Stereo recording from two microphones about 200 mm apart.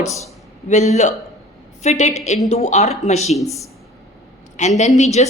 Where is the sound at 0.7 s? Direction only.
35° left (ahead or behind).